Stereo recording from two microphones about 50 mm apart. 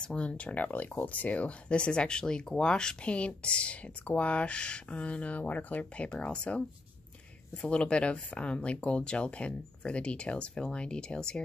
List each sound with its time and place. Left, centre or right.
0.0 s speech: centre